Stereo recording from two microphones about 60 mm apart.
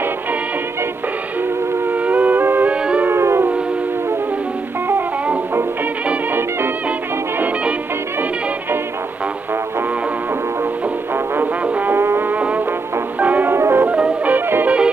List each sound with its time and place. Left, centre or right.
1.9 s music: right
2.7 s music: centre
3.1 s music: right
7.3 s music: right
11.6 s music: right
11.9 s music: right
12.4 s music: right
13.5 s music: right
13.8 s music: right